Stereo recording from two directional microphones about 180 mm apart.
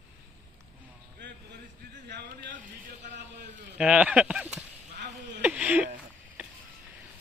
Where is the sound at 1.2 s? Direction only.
75° right (ahead or behind).